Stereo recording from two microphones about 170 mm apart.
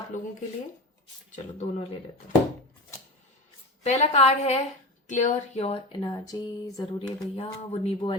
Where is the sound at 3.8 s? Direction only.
40° left (ahead or behind).